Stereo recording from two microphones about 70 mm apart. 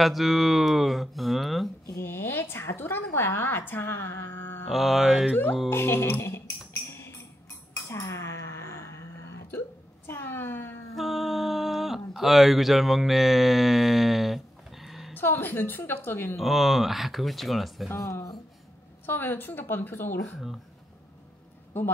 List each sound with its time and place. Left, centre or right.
0.0 s speech: centre
2.0 s a woman's voice: left
4.6 s speech: centre
5.7 s a woman's voice: left
6.9 s music: left
7.9 s hiccup: left
10.0 s a sound: left
11.0 s a sound: centre
15.1 s a woman's voice: left
16.3 s speech: centre
17.9 s speech: left
19.0 s a woman's voice: left
21.7 s a woman's voice: left